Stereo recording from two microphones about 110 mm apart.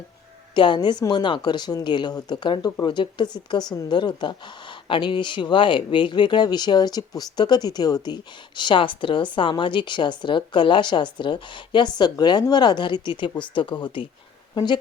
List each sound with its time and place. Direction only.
0.5 s a woman's voice: 45° left (ahead or behind)